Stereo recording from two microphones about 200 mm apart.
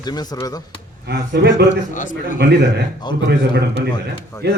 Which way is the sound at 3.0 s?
20° left (ahead or behind).